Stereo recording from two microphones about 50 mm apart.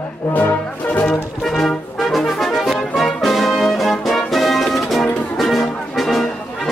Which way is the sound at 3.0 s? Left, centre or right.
Centre.